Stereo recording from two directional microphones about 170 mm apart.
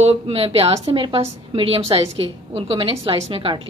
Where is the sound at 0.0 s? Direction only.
35° right (ahead or behind).